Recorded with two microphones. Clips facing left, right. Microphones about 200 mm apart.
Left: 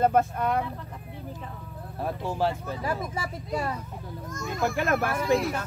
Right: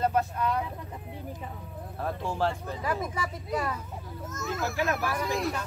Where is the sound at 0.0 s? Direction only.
50° left (ahead or behind).